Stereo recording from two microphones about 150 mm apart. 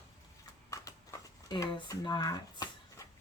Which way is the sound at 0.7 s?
20° left (ahead or behind).